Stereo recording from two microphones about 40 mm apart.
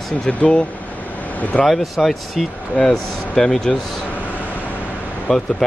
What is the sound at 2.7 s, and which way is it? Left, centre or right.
Speech, centre.